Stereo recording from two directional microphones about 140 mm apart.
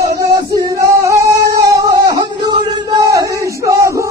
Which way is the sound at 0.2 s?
25° right (ahead or behind).